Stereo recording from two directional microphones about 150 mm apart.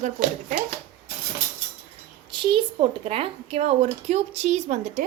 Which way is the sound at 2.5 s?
40° right (ahead or behind).